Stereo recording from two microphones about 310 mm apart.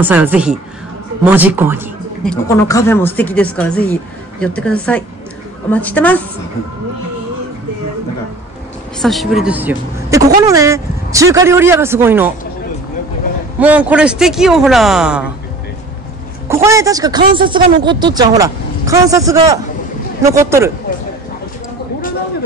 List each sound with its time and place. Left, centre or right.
0.0 s speech: centre
2.2 s speech: centre
9.0 s speech: centre
13.6 s speech: centre
16.4 s speech: centre